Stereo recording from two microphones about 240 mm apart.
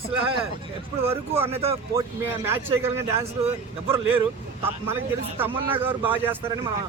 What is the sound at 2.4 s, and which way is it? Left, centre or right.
Speech, centre.